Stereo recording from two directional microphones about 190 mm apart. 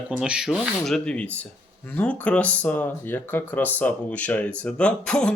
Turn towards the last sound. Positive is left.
turn(degrees=5)  # may be behind; listen again after turning